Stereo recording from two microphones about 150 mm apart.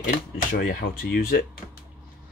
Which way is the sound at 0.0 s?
70° left (ahead or behind).